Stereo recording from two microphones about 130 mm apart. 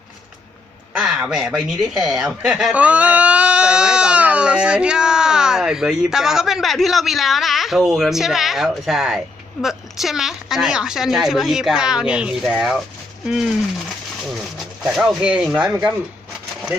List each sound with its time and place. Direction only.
0.9 s speech: 5° right (ahead or behind)